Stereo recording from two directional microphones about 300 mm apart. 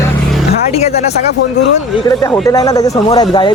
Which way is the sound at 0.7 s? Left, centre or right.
Left.